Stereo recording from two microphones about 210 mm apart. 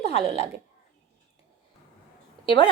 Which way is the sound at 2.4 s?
25° left (ahead or behind).